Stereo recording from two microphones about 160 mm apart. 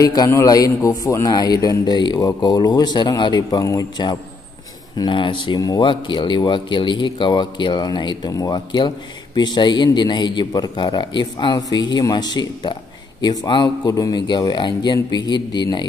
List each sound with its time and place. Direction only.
0.0 s speech: 25° left (ahead or behind)